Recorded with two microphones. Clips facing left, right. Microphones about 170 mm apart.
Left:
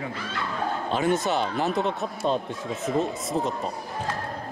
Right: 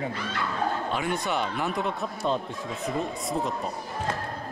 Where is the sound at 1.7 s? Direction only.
20° left (ahead or behind).